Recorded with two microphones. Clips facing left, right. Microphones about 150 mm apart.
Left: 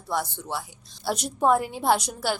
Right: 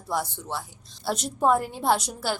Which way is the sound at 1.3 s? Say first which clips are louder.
Left 1 dB; centre (ahead or behind).